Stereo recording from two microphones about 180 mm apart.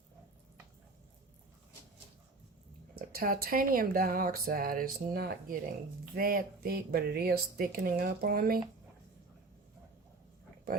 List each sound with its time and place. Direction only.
2.9 s speech: 55° right (ahead or behind)